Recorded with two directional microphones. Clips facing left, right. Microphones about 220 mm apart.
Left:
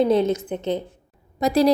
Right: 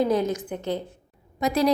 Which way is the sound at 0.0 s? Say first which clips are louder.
Left 4 dB; 25° left (ahead or behind).